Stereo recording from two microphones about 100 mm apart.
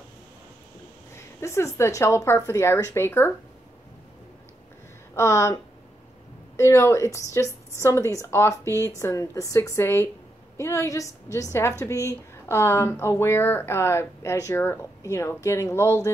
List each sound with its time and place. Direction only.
1.1 s a woman's voice: 30° left (ahead or behind)
5.1 s a woman's voice: 30° left (ahead or behind)